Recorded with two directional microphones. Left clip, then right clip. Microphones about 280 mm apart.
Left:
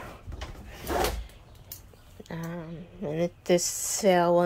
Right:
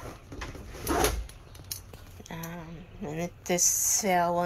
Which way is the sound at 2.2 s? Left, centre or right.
Centre.